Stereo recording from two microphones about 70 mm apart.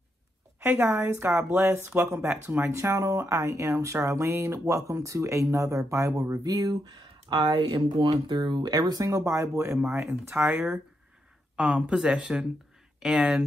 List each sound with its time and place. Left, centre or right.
0.7 s speech: right
2.7 s speech: right
11.5 s speech: centre